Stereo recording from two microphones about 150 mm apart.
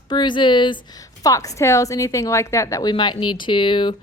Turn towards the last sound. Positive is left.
turn(degrees=35)  # may be behind; listen again after turning